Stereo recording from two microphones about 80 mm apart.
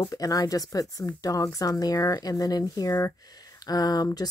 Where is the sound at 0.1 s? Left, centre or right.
Left.